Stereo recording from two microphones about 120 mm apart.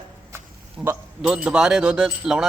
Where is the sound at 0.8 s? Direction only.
10° right (ahead or behind).